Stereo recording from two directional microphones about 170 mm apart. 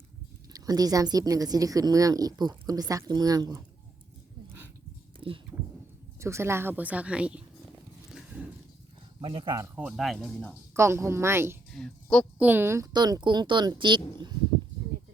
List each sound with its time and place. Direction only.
0.5 s speech: 20° right (ahead or behind)
5.2 s speech: 30° right (ahead or behind)
6.1 s speech: 15° right (ahead or behind)
9.2 s speech: 30° right (ahead or behind)
9.7 s speech: 5° right (ahead or behind)
10.8 s speech: 15° right (ahead or behind)
11.7 s a woman's voice: 5° left (ahead or behind)
12.4 s speech: 10° right (ahead or behind)